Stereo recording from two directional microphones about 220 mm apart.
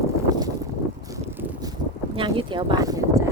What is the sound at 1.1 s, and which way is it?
Vehicle, 15° right (ahead or behind).